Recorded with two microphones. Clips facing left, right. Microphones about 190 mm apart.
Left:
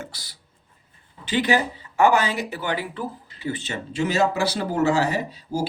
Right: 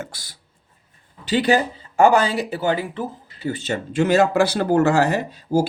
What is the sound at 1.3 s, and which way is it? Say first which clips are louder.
Speech: right 3 dB; 35° right (ahead or behind).